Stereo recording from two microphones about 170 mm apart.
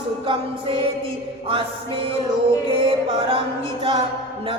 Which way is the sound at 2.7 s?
35° right (ahead or behind).